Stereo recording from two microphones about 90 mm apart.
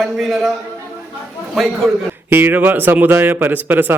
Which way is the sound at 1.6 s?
Centre (ahead or behind).